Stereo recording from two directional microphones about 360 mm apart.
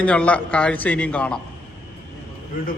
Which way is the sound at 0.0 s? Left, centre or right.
Centre.